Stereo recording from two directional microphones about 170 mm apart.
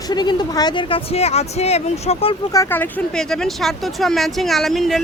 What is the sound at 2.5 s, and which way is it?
Speech, 15° left (ahead or behind).